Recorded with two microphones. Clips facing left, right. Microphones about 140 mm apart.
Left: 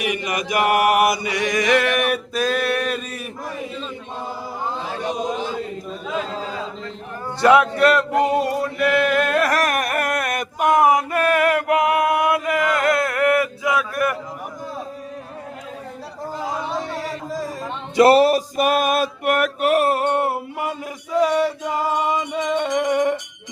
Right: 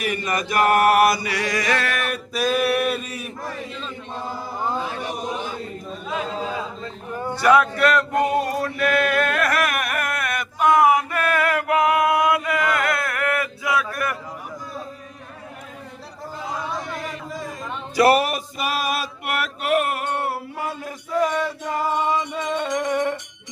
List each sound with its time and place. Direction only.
0.0 s chant: 15° left (ahead or behind)
2.3 s a sound: 5° right (ahead or behind)
7.8 s chant: 25° left (ahead or behind)
9.5 s chant: 35° left (ahead or behind); by 13.8 s 20° left (ahead or behind)
16.9 s a sound: 35° left (ahead or behind)
17.7 s music: 25° left (ahead or behind)
18.5 s male singing: 50° left (ahead or behind); by 23.1 s 15° left (ahead or behind)